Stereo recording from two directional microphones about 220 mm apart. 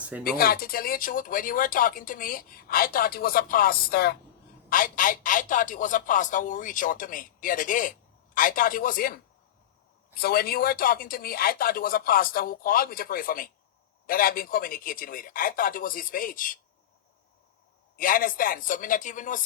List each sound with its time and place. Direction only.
0.3 s speech: 40° left (ahead or behind)
17.9 s speech: 40° left (ahead or behind)